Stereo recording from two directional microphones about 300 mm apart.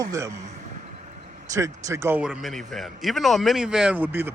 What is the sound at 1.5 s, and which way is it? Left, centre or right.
Speech, centre.